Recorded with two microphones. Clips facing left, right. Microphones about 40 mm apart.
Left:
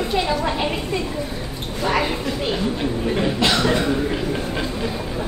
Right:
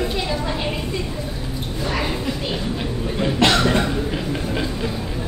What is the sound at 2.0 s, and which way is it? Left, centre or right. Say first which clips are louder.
A man's voice: left 1 dB; centre.